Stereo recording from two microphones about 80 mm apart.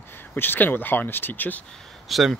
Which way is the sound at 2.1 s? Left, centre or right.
Centre.